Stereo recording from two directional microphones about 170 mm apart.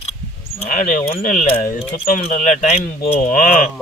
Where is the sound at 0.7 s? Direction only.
55° left (ahead or behind).